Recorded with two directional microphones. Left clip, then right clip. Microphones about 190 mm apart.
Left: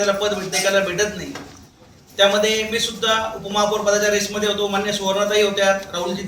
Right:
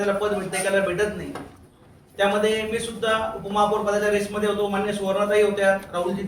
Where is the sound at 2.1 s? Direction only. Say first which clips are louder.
Left 5 dB; centre (ahead or behind).